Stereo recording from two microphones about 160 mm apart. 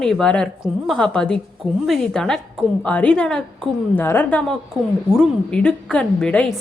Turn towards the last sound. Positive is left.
turn(degrees=5)  # may be behind; listen again after turning